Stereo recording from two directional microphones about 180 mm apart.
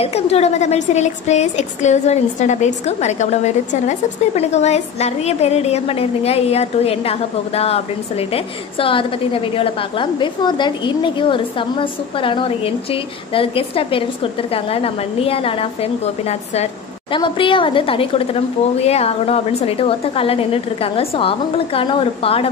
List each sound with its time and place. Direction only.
0.0 s a woman's voice: 35° left (ahead or behind)